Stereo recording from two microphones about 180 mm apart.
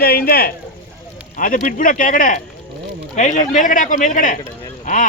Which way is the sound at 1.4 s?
50° left (ahead or behind).